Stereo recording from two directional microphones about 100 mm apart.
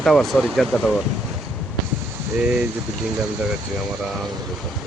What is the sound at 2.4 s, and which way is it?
Speech, 10° right (ahead or behind).